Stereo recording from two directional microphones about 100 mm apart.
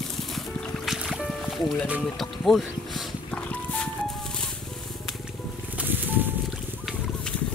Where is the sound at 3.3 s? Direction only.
15° left (ahead or behind).